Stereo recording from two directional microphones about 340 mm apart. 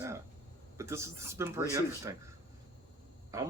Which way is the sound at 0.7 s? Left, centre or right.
Centre.